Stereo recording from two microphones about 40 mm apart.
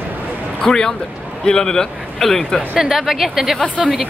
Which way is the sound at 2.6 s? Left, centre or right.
Centre.